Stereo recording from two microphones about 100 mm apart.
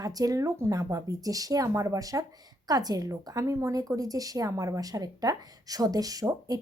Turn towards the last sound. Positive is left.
turn(degrees=-40)  # may be behind; listen again after turning